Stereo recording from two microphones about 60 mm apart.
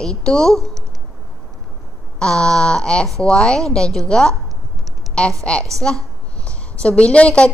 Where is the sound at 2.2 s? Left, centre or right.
Centre.